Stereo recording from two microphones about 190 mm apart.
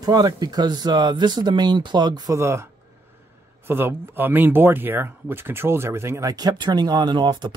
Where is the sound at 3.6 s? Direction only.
10° right (ahead or behind).